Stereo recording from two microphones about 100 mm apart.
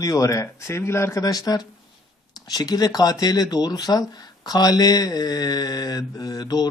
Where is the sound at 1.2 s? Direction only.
40° left (ahead or behind).